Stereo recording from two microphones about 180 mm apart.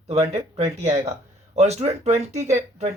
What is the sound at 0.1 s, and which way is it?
Speech, 35° right (ahead or behind).